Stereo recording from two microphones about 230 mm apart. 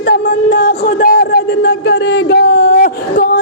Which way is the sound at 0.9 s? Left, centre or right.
Left.